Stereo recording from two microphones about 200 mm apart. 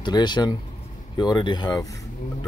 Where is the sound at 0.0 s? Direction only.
20° left (ahead or behind).